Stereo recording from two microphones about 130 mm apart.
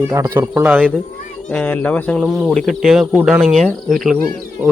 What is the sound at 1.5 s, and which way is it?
Speech, 10° left (ahead or behind).